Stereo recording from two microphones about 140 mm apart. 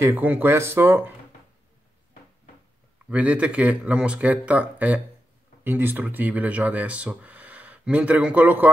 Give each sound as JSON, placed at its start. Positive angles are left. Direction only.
{"t": 0.0, "sound": "speech", "side_deg": -15}
{"t": 3.1, "sound": "speech", "side_deg": -10}